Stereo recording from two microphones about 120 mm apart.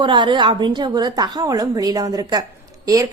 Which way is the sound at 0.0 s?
40° right (ahead or behind).